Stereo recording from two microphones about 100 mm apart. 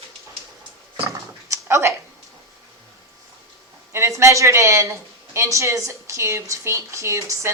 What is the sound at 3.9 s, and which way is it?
Speech, 30° right (ahead or behind).